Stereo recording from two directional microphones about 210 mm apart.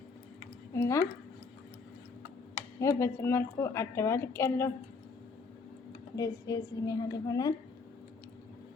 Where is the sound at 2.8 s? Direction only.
15° left (ahead or behind).